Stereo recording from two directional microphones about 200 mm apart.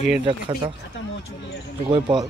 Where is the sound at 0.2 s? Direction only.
25° right (ahead or behind).